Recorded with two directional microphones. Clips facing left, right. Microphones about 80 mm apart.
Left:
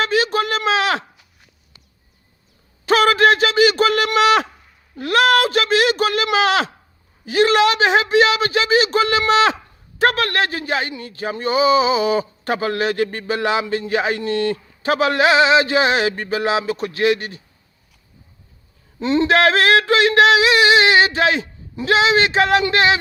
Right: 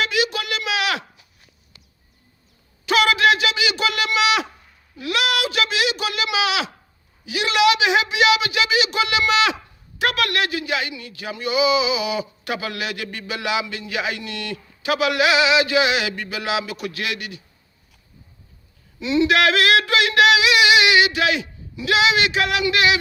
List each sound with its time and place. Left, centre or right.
0.0 s speech: left
2.8 s speech: left
18.9 s speech: left